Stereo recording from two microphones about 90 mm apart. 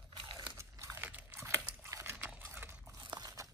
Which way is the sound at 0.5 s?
30° right (ahead or behind).